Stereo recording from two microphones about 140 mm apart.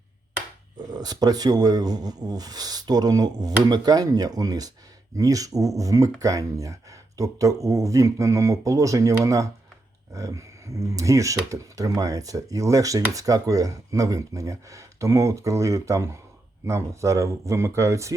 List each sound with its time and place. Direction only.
0.8 s speech: 30° right (ahead or behind)